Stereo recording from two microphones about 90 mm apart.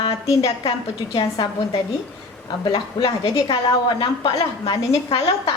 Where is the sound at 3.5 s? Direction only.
55° left (ahead or behind).